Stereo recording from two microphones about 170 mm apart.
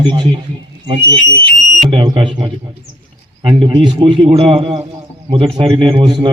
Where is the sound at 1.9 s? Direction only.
25° right (ahead or behind).